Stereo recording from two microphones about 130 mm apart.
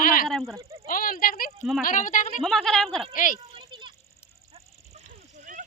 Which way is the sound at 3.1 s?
90° left.